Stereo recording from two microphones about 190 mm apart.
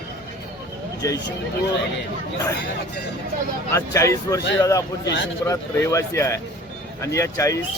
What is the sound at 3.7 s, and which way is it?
Speech, 15° left (ahead or behind).